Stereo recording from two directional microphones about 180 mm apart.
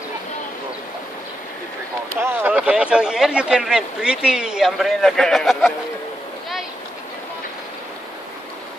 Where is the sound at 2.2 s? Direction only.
10° right (ahead or behind).